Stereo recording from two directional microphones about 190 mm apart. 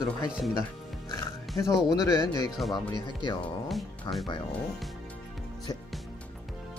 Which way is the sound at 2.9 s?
25° left (ahead or behind).